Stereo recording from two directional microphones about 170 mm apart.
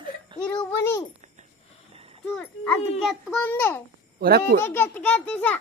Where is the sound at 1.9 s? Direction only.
35° right (ahead or behind).